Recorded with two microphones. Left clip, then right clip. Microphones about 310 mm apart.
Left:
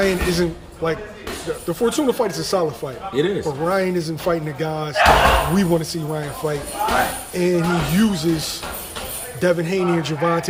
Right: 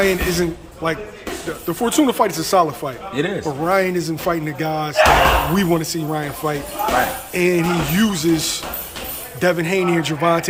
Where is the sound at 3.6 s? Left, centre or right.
Centre.